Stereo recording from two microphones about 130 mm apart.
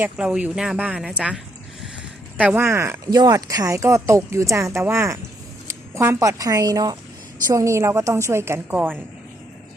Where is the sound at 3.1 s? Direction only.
30° right (ahead or behind).